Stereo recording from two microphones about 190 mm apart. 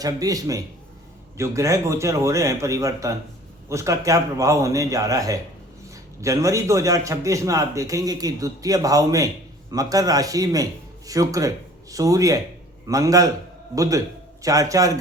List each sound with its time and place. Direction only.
0.0 s a man's voice: 20° right (ahead or behind)